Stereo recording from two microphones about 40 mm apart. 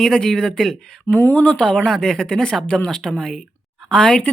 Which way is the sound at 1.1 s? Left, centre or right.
Left.